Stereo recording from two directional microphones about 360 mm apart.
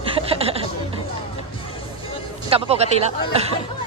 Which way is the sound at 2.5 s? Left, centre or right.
Centre.